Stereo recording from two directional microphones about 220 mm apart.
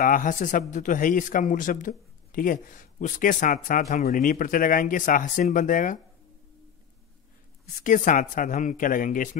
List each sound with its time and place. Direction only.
0.0 s speech: 40° left (ahead or behind)
7.8 s speech: 35° left (ahead or behind)